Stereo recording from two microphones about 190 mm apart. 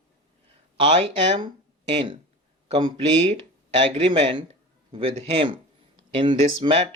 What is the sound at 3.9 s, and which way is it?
Speech, 30° right (ahead or behind).